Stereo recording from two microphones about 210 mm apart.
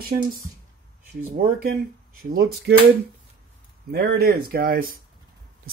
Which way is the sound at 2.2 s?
45° right (ahead or behind).